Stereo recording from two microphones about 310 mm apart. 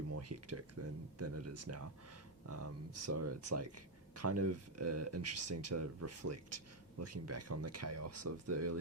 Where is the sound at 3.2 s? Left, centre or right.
Right.